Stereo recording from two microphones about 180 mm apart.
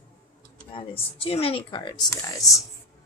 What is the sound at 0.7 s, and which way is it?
Speech, 30° left (ahead or behind).